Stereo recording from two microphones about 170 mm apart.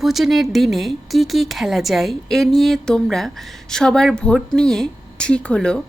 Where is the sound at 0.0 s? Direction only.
Centre (ahead or behind).